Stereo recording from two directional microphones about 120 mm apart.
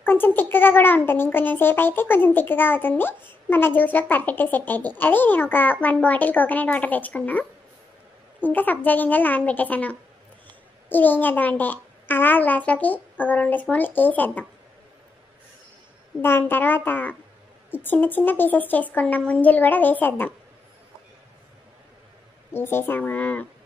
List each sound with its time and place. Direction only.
0.0 s speech: 15° left (ahead or behind)
16.2 s speech: 20° left (ahead or behind)
22.5 s speech: 20° left (ahead or behind)